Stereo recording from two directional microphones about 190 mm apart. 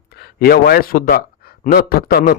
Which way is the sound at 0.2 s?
55° left (ahead or behind).